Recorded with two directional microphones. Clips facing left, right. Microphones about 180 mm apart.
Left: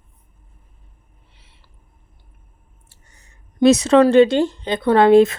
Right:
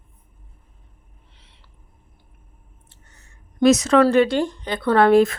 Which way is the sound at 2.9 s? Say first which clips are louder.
Even; 10° left (ahead or behind).